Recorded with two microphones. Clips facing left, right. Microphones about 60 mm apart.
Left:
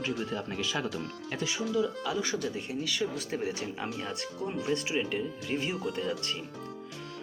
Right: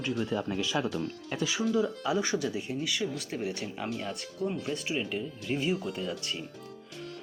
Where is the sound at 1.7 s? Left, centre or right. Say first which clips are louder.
Left 2 dB; right.